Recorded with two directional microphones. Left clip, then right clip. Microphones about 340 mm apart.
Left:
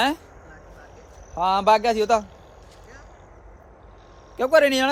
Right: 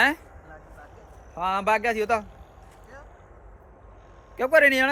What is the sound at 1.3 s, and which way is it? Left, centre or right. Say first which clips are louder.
Speech: left 5 dB; centre.